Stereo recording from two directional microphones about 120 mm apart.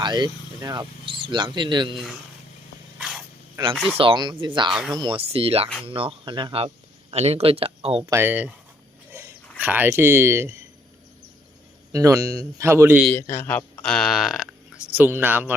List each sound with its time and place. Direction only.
0.0 s speech: 35° right (ahead or behind)
1.0 s speech: 45° right (ahead or behind)
3.6 s a man's voice: 30° right (ahead or behind)
3.9 s speech: 45° right (ahead or behind)
4.7 s speech: 5° right (ahead or behind)
5.1 s speech: 55° right (ahead or behind)
7.1 s speech: 60° right (ahead or behind)
8.0 s speech: 20° right (ahead or behind)
9.6 s a man's voice: 15° right (ahead or behind)
11.9 s a man's voice: 25° right (ahead or behind)
13.1 s a man's voice: 20° left (ahead or behind)
13.5 s speech: 10° left (ahead or behind)
14.9 s speech: 15° right (ahead or behind)